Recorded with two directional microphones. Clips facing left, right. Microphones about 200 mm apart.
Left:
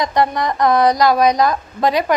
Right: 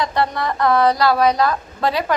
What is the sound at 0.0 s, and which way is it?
A woman's voice, 15° left (ahead or behind).